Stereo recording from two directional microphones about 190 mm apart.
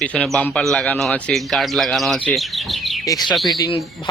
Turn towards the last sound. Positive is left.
turn(degrees=0)  # may be behind; listen again after turning